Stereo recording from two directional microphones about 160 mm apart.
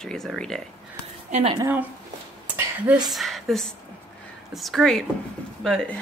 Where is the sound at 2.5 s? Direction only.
10° right (ahead or behind).